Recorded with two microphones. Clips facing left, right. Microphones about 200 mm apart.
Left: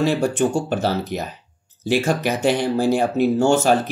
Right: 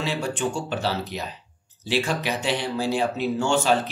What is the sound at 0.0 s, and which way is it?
Speech, 50° left (ahead or behind).